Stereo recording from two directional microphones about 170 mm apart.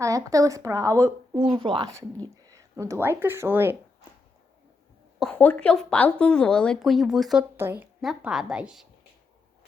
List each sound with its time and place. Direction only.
0.0 s speech: 20° right (ahead or behind)
5.2 s speech: 10° left (ahead or behind)
7.5 s a woman's voice: 15° right (ahead or behind)
8.0 s speech: centre (ahead or behind)